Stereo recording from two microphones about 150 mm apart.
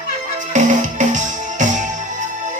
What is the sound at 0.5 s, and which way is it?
Music, 55° right (ahead or behind).